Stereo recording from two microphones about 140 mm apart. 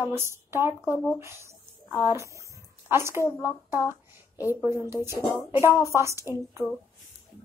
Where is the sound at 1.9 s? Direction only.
15° right (ahead or behind).